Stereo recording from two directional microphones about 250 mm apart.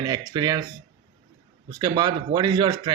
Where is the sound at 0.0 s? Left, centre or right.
Centre.